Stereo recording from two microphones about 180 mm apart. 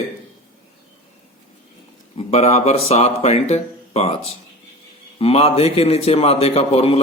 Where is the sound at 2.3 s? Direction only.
35° left (ahead or behind).